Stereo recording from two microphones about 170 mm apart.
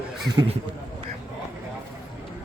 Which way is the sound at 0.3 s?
25° right (ahead or behind).